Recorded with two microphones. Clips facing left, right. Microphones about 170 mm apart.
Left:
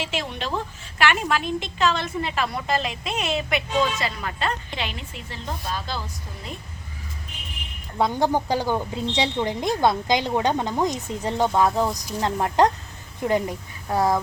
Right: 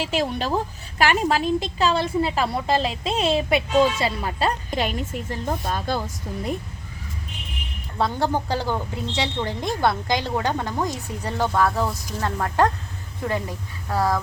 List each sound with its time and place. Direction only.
0.0 s a woman's voice: 40° right (ahead or behind)
7.9 s a woman's voice: 15° left (ahead or behind)